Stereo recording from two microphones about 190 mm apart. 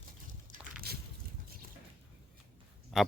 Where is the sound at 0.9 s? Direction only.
55° right (ahead or behind).